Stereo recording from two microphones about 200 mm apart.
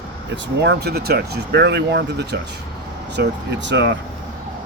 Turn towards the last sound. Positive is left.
turn(degrees=-60)  # may be behind; listen again after turning